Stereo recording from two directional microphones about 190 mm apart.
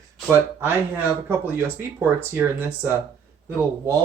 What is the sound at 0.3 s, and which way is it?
Speech, 10° right (ahead or behind).